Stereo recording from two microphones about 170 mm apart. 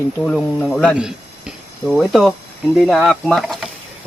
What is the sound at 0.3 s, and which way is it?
Speech, centre (ahead or behind).